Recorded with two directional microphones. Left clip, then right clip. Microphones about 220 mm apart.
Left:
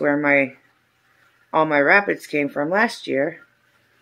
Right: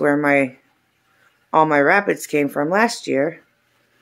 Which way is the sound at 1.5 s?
15° right (ahead or behind).